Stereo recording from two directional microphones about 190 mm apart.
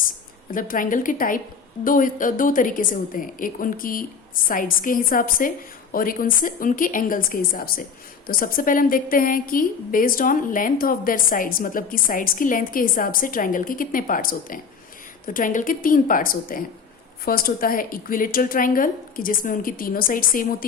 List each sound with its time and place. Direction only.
0.5 s a woman's voice: 45° left (ahead or behind)